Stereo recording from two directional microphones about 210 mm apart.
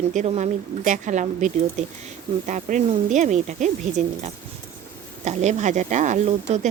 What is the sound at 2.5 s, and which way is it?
Speech, 35° right (ahead or behind).